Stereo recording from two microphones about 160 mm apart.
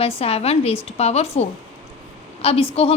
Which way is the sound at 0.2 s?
40° left (ahead or behind).